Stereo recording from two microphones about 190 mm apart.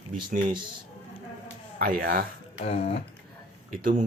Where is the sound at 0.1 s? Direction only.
45° right (ahead or behind).